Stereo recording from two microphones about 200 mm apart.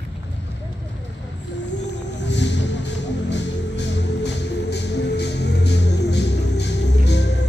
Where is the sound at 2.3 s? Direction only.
60° left (ahead or behind).